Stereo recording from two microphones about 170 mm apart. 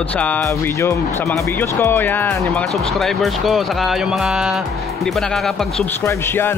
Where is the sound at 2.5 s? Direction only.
Centre (ahead or behind).